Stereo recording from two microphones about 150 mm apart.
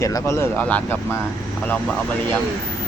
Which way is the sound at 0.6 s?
10° left (ahead or behind).